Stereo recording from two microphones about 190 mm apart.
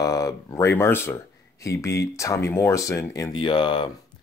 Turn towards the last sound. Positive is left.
turn(degrees=25)  # may be behind; listen again after turning